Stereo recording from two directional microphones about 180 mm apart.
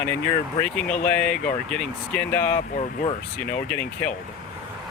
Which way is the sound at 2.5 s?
40° left (ahead or behind).